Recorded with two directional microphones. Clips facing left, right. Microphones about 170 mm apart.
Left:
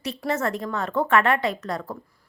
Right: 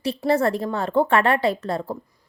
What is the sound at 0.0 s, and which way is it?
A woman's voice, 30° right (ahead or behind).